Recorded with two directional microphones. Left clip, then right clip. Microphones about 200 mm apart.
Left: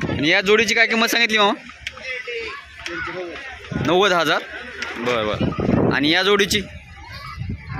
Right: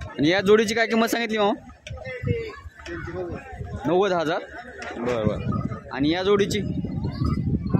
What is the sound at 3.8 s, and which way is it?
Speech, centre (ahead or behind).